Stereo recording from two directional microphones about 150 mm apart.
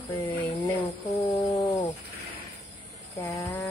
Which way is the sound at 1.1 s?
30° left (ahead or behind).